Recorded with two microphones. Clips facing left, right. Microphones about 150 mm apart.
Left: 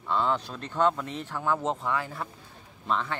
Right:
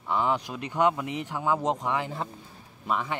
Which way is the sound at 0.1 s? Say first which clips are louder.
Right 1 dB; 15° right (ahead or behind).